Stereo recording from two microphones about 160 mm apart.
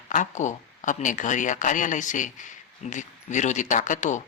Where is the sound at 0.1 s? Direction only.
50° left (ahead or behind).